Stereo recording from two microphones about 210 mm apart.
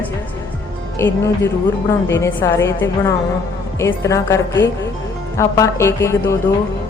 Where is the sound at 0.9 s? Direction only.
10° left (ahead or behind).